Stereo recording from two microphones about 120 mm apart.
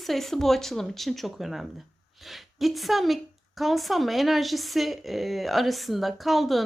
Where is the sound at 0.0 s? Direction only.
Centre (ahead or behind).